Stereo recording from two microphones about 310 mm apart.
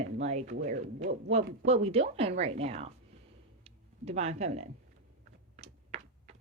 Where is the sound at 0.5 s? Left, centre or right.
Right.